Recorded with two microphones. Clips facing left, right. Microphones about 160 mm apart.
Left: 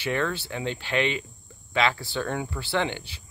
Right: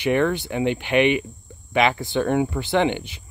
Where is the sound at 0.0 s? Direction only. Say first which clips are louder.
Right 7 dB; 15° right (ahead or behind).